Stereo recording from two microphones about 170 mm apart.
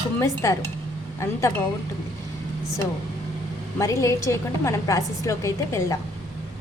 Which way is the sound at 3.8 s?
20° left (ahead or behind).